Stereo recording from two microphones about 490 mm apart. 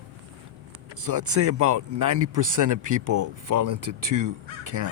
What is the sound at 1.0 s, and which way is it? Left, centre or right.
Speech, right.